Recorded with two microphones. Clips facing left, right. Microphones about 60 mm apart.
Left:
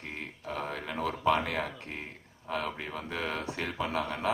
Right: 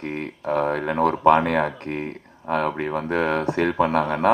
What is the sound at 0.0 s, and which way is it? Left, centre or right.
Speech, right.